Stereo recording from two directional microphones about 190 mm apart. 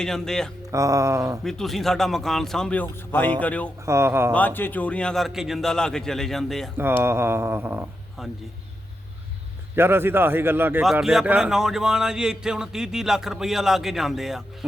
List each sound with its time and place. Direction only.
0.0 s a man's voice: 5° left (ahead or behind)
0.7 s speech: 15° right (ahead or behind)
1.5 s a man's voice: centre (ahead or behind)
3.8 s speech: 15° right (ahead or behind)
4.3 s a man's voice: 10° left (ahead or behind)
6.7 s speech: 10° right (ahead or behind)
9.7 s a man's voice: 10° right (ahead or behind)